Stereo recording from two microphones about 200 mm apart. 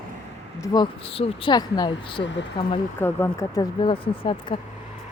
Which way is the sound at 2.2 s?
65° left (ahead or behind).